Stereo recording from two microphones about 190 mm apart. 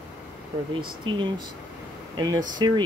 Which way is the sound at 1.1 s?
25° right (ahead or behind).